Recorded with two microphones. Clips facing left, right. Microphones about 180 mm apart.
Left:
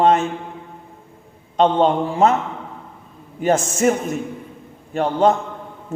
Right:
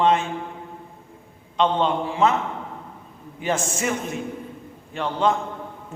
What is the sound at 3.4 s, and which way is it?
A man's voice, 45° left (ahead or behind).